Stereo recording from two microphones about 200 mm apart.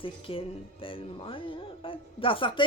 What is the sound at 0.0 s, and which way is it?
Speech, 25° left (ahead or behind).